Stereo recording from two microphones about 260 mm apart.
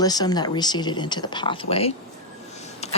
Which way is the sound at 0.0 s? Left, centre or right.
Centre.